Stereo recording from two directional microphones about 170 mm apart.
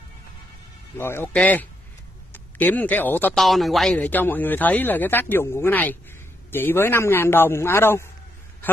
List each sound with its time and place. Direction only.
0.9 s speech: 15° left (ahead or behind)
3.4 s speech: centre (ahead or behind)